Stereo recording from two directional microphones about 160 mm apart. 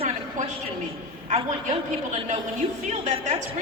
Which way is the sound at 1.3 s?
50° right (ahead or behind).